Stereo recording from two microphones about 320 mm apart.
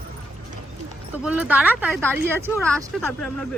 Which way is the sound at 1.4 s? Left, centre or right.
Centre.